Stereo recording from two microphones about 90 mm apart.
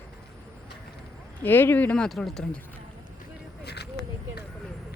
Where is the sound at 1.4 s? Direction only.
20° left (ahead or behind).